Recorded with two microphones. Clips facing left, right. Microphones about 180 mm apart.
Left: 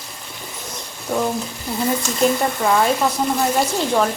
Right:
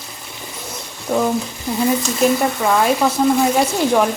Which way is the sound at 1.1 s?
5° right (ahead or behind).